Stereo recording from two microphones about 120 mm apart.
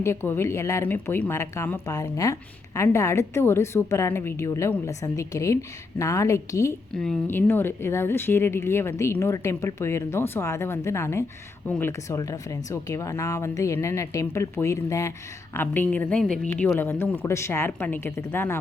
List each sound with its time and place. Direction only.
0.0 s speech: 20° left (ahead or behind)
6.9 s speech: 5° left (ahead or behind)
7.3 s speech: 20° left (ahead or behind)
16.7 s speech: 20° left (ahead or behind)